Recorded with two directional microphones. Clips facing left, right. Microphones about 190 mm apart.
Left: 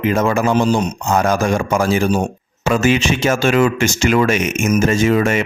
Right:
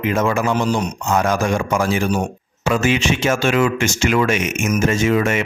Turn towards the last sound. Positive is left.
turn(degrees=35)  # may be behind; listen again after turning